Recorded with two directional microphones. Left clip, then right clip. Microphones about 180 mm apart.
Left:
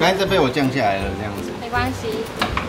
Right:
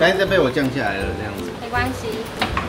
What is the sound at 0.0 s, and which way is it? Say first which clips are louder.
Speech: right 1 dB; 50° left (ahead or behind).